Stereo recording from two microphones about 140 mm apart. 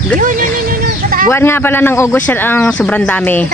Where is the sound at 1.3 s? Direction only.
15° left (ahead or behind).